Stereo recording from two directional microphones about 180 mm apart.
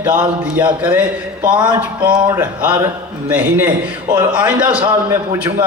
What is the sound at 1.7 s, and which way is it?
Speech, 25° right (ahead or behind).